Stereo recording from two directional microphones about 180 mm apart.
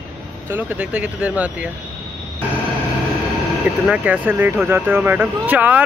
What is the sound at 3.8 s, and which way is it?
Speech, 10° right (ahead or behind).